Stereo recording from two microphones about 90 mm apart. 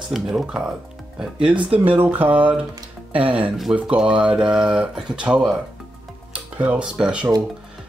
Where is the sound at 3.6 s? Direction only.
5° right (ahead or behind).